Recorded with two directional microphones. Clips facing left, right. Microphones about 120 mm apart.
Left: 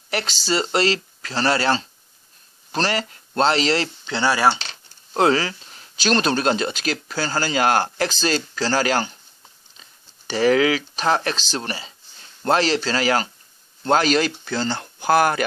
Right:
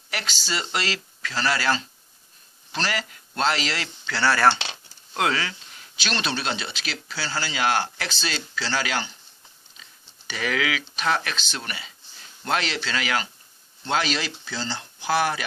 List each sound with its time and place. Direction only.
0.1 s speech: 35° left (ahead or behind)
4.0 s mechanisms: 15° left (ahead or behind)
5.1 s speech: 35° left (ahead or behind)